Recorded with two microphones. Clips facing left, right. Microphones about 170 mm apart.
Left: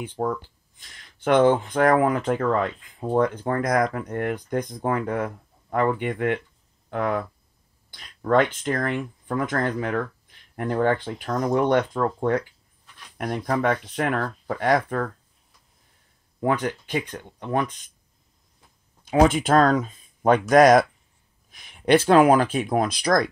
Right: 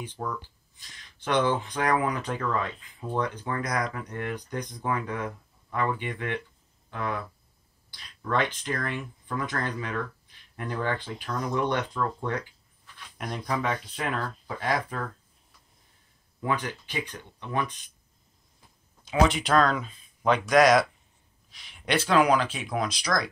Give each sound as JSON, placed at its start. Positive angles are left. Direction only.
{"t": 0.0, "sound": "speech", "side_deg": 55}
{"t": 16.3, "sound": "speech", "side_deg": 50}
{"t": 19.0, "sound": "speech", "side_deg": 45}